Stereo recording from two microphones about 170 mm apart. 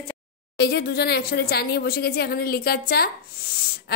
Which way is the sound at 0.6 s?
75° left (ahead or behind).